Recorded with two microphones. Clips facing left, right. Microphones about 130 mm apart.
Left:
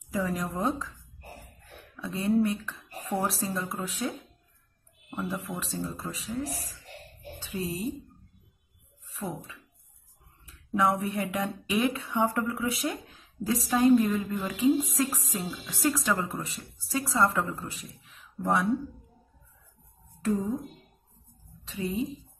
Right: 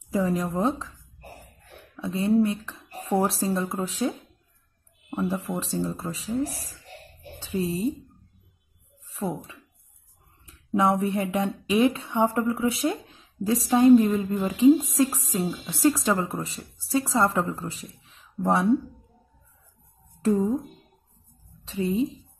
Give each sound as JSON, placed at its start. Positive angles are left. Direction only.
{"t": 0.1, "sound": "speech", "side_deg": -25}
{"t": 2.0, "sound": "speech", "side_deg": -25}
{"t": 5.1, "sound": "speech", "side_deg": -30}
{"t": 9.0, "sound": "speech", "side_deg": -30}
{"t": 10.4, "sound": "a sound", "side_deg": -25}
{"t": 11.3, "sound": "speech", "side_deg": -25}
{"t": 20.2, "sound": "speech", "side_deg": -30}
{"t": 21.6, "sound": "speech", "side_deg": -30}